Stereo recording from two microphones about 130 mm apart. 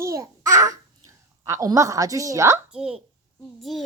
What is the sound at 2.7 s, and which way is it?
A child's voice, 5° right (ahead or behind).